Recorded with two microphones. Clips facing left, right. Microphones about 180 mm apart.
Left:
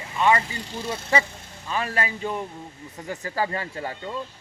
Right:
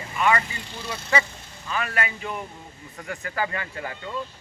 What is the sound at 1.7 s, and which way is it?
Speech, 30° left (ahead or behind).